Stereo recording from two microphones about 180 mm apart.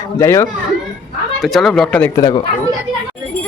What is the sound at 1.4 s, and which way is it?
Speech, centre (ahead or behind).